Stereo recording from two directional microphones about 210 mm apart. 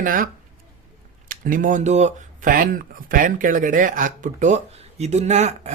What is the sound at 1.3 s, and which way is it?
Speech, 40° right (ahead or behind).